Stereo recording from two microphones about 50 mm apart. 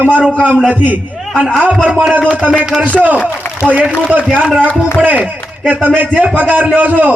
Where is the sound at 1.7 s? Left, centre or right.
Right.